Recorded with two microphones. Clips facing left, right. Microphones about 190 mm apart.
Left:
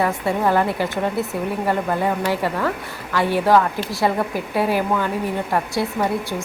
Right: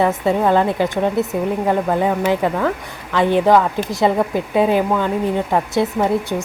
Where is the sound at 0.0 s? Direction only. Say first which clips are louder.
Right 4 dB; 20° right (ahead or behind).